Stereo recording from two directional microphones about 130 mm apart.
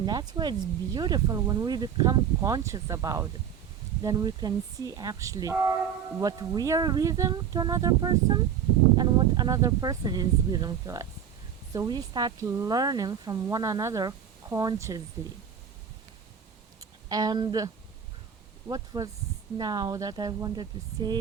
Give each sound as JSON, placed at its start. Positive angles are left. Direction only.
{"t": 0.0, "sound": "speech", "side_deg": -30}
{"t": 17.1, "sound": "speech", "side_deg": -30}
{"t": 18.7, "sound": "speech", "side_deg": -25}